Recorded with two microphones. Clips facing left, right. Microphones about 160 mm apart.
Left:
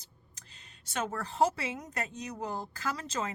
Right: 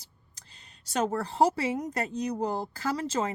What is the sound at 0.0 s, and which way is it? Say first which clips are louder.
Speech: left 1 dB; 35° right (ahead or behind).